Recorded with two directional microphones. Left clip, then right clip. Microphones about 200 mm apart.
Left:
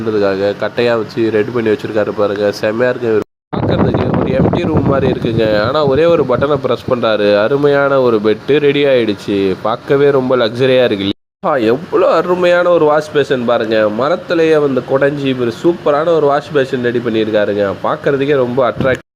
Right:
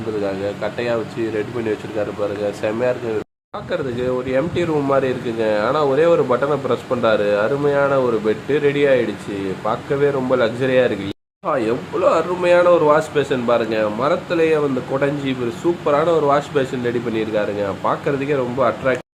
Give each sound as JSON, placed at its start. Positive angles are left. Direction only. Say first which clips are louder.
{"t": 0.2, "sound": "speech", "louder": "left 9 dB", "side_deg": 30}
{"t": 4.3, "sound": "speech", "louder": "left 5 dB", "side_deg": 35}